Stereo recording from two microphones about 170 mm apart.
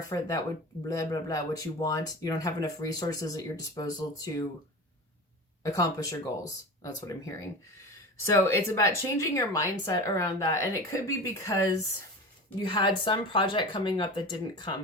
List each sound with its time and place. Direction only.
0.1 s speech: 20° left (ahead or behind)
5.6 s a woman's voice: 20° left (ahead or behind)